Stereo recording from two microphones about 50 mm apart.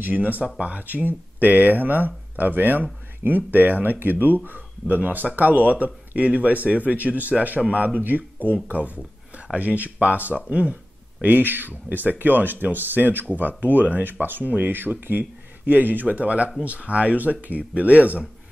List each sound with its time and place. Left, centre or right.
0.0 s speech: right